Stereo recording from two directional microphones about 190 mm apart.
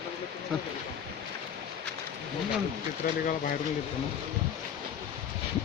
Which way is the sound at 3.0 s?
50° left (ahead or behind).